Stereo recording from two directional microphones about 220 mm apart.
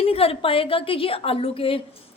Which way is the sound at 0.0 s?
25° left (ahead or behind).